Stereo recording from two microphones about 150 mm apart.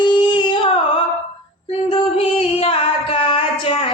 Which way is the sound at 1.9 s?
40° left (ahead or behind).